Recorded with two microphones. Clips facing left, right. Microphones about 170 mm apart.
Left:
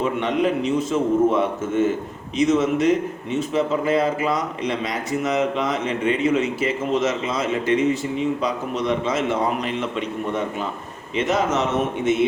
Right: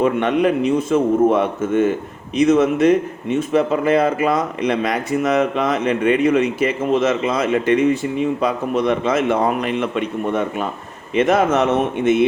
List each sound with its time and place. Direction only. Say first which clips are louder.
0.0 s speech: right 5 dB; 60° right (ahead or behind)